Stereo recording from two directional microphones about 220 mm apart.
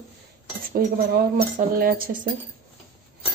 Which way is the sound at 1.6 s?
40° right (ahead or behind).